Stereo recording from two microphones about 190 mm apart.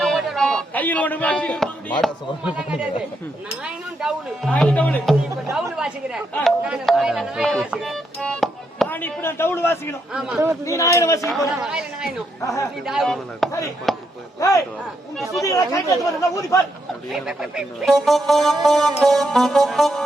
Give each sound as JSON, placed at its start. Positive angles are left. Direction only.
{"t": 0.0, "sound": "a sound", "side_deg": 0}
{"t": 2.6, "sound": "speech", "side_deg": -5}
{"t": 4.0, "sound": "speech", "side_deg": 5}
{"t": 5.7, "sound": "speech", "side_deg": -5}
{"t": 10.1, "sound": "speech", "side_deg": -5}
{"t": 10.7, "sound": "speech", "side_deg": 15}
{"t": 11.3, "sound": "speech", "side_deg": 0}
{"t": 13.9, "sound": "chop", "side_deg": 0}
{"t": 14.3, "sound": "speech", "side_deg": 15}
{"t": 17.1, "sound": "speech", "side_deg": -5}